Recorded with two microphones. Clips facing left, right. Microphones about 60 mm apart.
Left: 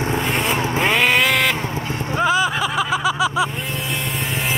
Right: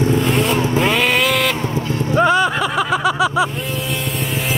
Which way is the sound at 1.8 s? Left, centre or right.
Left.